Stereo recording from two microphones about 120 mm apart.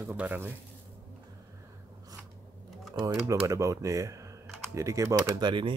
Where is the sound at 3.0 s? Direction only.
25° right (ahead or behind); by 5.7 s 40° right (ahead or behind).